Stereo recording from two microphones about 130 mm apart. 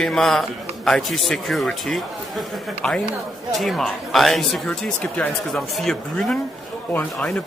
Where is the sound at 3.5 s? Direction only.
Centre (ahead or behind).